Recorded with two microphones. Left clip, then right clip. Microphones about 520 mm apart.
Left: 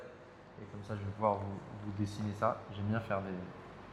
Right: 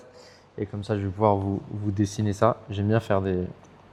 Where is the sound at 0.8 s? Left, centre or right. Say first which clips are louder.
Right 10 dB; right.